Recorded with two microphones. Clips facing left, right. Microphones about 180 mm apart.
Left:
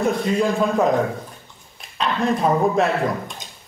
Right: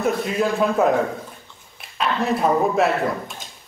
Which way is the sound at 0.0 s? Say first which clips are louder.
Left 2 dB; 5° right (ahead or behind).